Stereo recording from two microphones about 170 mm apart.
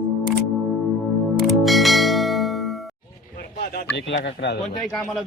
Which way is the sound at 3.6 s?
60° left (ahead or behind).